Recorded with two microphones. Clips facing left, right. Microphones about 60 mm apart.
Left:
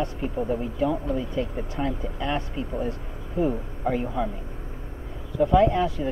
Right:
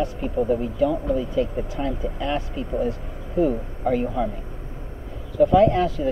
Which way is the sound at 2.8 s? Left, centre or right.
Left.